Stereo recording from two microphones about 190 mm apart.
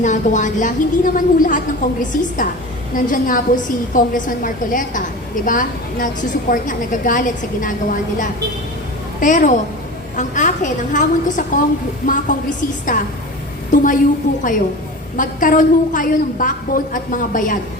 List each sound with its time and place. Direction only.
0.0 s a woman's voice: 40° left (ahead or behind)
9.2 s a woman's voice: 40° left (ahead or behind)
15.1 s a woman's voice: 45° left (ahead or behind)